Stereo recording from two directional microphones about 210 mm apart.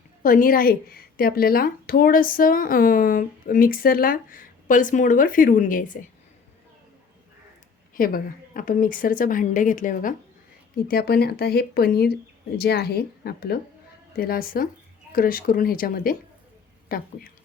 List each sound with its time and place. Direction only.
0.2 s a woman's voice: 40° left (ahead or behind)
7.9 s a woman's voice: 40° left (ahead or behind)